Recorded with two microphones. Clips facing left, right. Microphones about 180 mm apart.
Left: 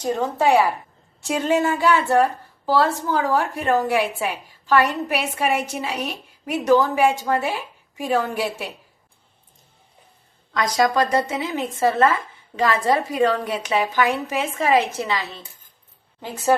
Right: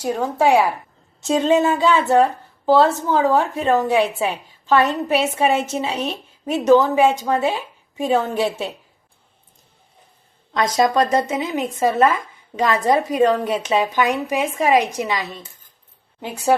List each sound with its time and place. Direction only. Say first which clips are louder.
0.0 s a woman's voice: right 2 dB; 10° right (ahead or behind)
10.5 s a woman's voice: right 2 dB; 25° right (ahead or behind)